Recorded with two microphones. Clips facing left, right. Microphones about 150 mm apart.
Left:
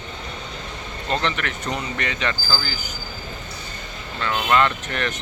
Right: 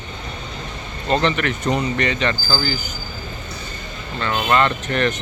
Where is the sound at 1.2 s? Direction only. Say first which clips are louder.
Right 6 dB; centre (ahead or behind).